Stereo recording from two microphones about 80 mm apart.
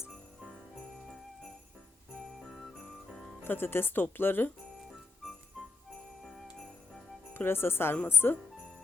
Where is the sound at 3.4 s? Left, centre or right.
Left.